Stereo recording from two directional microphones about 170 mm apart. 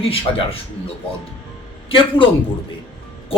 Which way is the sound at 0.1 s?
35° left (ahead or behind).